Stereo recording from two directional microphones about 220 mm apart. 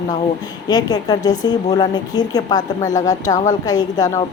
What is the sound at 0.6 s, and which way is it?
A woman's voice, 20° left (ahead or behind).